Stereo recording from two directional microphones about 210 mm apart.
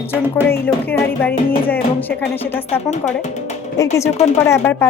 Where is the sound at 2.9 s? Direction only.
35° left (ahead or behind).